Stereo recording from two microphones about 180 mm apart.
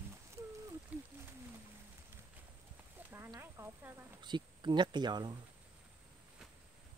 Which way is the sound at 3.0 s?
15° right (ahead or behind).